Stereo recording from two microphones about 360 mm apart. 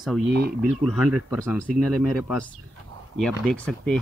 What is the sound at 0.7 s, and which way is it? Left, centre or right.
Speech, centre.